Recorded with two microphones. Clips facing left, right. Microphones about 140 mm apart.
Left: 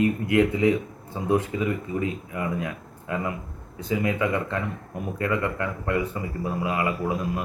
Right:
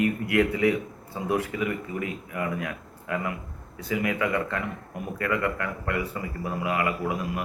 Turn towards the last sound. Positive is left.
turn(degrees=25)  # may be behind; listen again after turning